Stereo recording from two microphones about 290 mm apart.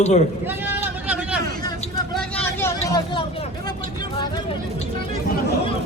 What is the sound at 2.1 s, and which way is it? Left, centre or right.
Vehicle, centre.